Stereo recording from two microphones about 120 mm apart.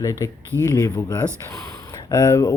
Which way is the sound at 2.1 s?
30° left (ahead or behind).